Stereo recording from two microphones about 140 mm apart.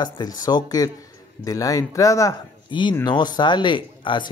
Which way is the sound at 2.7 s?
35° left (ahead or behind).